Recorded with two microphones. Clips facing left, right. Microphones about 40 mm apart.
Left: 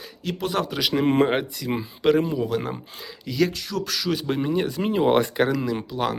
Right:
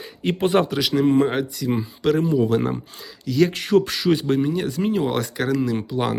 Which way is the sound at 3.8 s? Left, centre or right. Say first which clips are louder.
Right 5 dB; centre.